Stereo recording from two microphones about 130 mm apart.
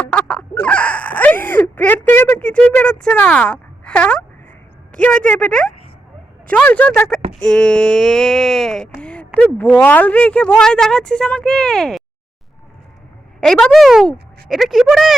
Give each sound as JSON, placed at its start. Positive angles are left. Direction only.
{"t": 0.0, "sound": "a sound", "side_deg": 10}
{"t": 4.9, "sound": "speech", "side_deg": 10}
{"t": 13.4, "sound": "speech", "side_deg": 5}